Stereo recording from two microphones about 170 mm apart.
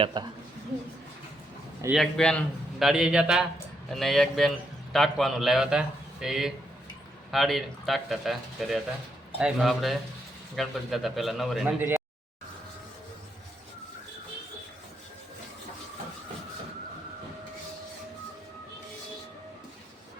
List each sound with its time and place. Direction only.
0.0 s speech: 25° right (ahead or behind)
1.9 s a man's voice: centre (ahead or behind); by 12.0 s 15° right (ahead or behind)